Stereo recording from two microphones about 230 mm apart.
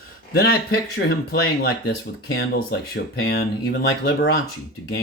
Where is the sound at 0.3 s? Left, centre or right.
Left.